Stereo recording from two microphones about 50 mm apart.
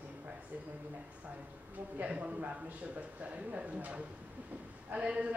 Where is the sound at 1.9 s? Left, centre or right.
Right.